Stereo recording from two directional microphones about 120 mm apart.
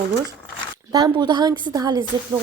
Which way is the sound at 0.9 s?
30° right (ahead or behind).